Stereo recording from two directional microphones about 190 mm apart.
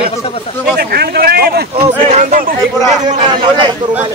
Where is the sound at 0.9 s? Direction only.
55° right (ahead or behind).